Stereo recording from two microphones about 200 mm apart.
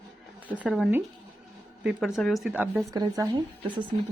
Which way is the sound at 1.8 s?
5° right (ahead or behind).